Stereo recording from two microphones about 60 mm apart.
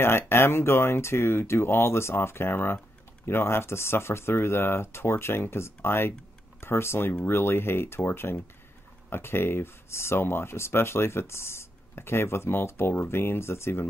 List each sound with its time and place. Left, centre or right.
0.0 s speech: left